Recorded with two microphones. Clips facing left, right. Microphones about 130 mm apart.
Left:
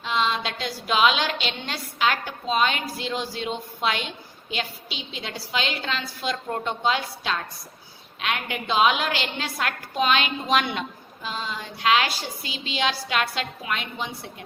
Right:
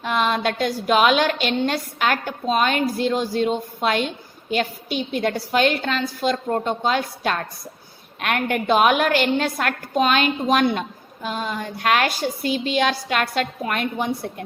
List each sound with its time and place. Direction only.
0.0 s a woman's voice: 50° right (ahead or behind)